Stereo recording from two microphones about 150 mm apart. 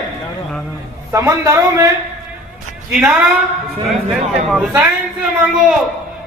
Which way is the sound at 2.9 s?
5° right (ahead or behind).